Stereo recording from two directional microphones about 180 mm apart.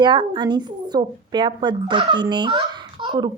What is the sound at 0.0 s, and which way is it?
A woman's voice, 25° right (ahead or behind).